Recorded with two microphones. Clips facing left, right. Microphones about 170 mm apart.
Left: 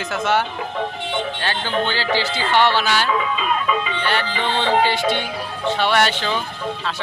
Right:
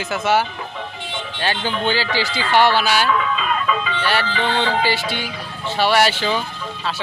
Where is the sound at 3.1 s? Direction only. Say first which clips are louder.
Right 1 dB; 20° left (ahead or behind).